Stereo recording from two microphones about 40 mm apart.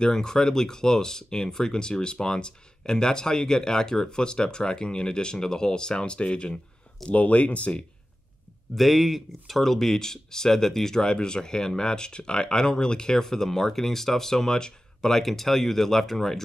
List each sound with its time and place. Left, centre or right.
0.0 s speech: centre
7.1 s speech: left
8.7 s speech: centre